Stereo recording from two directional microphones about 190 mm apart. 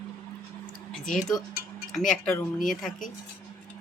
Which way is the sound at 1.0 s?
45° left (ahead or behind).